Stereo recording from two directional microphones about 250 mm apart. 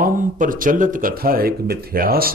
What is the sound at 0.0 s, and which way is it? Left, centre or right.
Speech, right.